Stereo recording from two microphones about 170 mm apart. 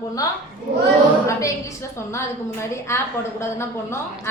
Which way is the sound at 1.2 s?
15° left (ahead or behind).